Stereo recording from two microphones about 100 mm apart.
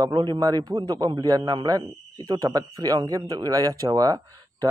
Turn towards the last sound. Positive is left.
turn(degrees=-35)  # may be behind; listen again after turning